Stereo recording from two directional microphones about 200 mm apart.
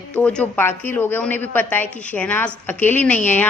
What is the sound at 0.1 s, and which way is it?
A woman's voice, 5° left (ahead or behind).